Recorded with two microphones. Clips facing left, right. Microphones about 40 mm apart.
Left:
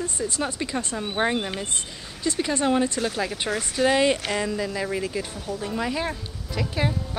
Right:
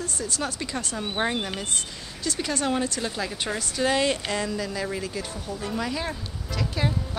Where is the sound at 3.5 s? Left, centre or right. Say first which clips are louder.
Left 3 dB; centre.